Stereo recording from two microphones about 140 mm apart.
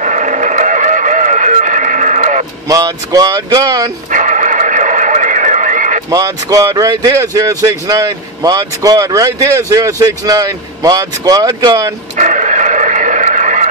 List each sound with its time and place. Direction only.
0.0 s music: 65° right (ahead or behind)
2.7 s speech: 25° right (ahead or behind)
4.1 s radio: 60° right (ahead or behind)
6.0 s speech: 25° right (ahead or behind)
12.2 s a sound: 60° right (ahead or behind)